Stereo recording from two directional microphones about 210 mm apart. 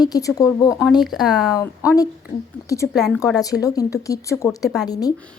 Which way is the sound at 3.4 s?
15° left (ahead or behind).